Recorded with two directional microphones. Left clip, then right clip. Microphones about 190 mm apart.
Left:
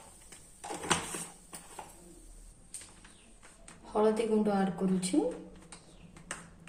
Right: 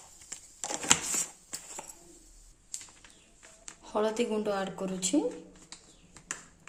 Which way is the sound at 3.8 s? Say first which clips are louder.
Left 1 dB; 35° right (ahead or behind).